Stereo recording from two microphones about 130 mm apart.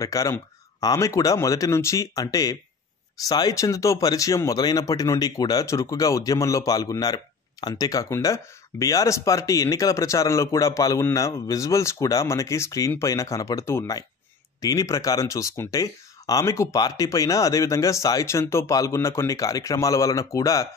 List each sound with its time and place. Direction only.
0.0 s speech: 25° left (ahead or behind)